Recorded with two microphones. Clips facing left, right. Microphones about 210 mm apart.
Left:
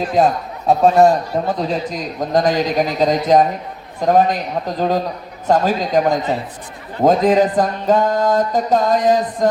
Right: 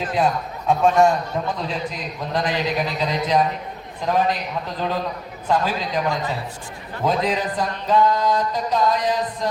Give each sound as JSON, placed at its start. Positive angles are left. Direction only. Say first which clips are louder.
{"t": 0.2, "sound": "speech", "louder": "left 6 dB", "side_deg": 40}